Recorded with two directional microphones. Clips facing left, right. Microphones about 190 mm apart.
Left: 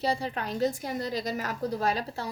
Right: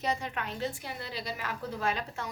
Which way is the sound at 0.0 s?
35° left (ahead or behind).